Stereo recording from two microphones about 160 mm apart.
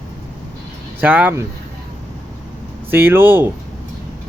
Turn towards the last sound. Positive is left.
turn(degrees=-15)  # may be behind; listen again after turning